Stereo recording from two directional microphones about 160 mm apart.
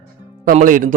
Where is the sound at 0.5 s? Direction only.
60° right (ahead or behind).